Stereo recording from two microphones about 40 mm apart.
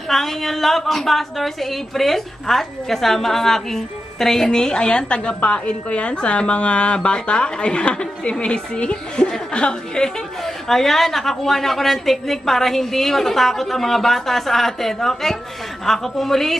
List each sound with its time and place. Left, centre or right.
0.1 s a woman's voice: centre; by 10.1 s left
10.4 s a woman's voice: centre